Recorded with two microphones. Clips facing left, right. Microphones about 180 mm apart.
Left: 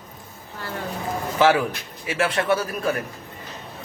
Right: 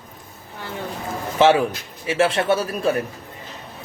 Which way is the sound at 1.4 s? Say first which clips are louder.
Right 3 dB; 25° right (ahead or behind).